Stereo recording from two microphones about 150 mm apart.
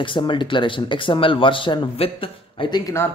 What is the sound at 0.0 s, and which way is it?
Speech, 35° left (ahead or behind).